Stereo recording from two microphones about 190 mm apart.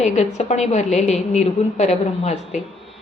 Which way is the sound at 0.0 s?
35° left (ahead or behind).